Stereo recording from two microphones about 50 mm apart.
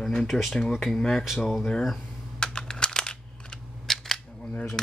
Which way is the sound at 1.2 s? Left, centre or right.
Centre.